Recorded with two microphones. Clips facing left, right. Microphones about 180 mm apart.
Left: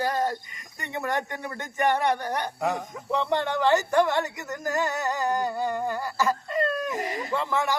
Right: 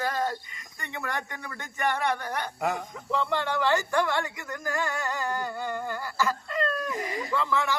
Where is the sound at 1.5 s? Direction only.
20° left (ahead or behind).